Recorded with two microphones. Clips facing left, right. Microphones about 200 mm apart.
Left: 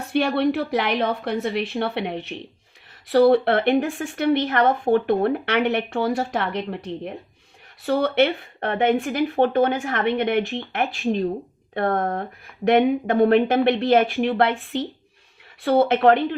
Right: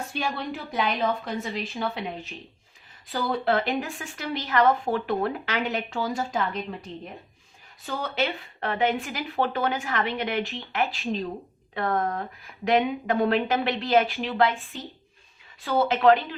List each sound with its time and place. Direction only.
0.1 s a woman's voice: 65° left (ahead or behind)